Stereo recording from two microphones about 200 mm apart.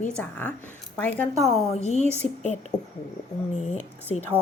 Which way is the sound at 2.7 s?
20° left (ahead or behind).